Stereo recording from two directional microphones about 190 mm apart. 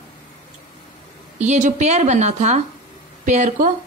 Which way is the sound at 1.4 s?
40° right (ahead or behind).